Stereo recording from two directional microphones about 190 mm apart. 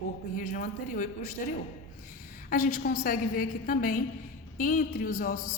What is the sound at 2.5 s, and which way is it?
A woman's voice, 45° left (ahead or behind).